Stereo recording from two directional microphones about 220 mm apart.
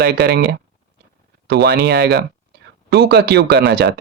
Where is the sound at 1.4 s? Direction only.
45° right (ahead or behind).